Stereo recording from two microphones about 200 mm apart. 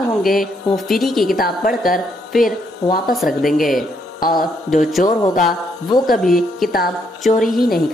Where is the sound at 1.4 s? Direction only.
45° left (ahead or behind).